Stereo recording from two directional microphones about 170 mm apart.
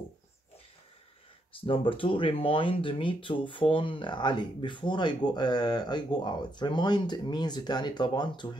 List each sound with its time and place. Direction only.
1.6 s speech: 30° left (ahead or behind)